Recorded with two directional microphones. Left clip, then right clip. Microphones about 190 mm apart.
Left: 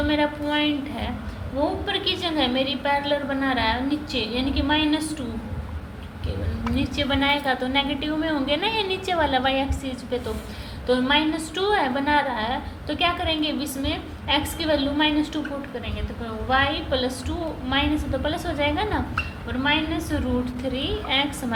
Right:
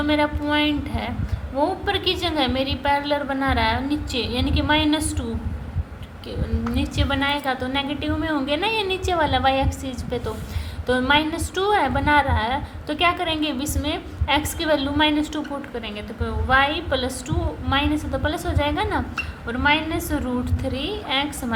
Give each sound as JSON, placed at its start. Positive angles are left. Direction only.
{"t": 0.1, "sound": "a woman's voice", "side_deg": -35}
{"t": 6.7, "sound": "a woman's voice", "side_deg": -30}
{"t": 16.5, "sound": "a woman's voice", "side_deg": -35}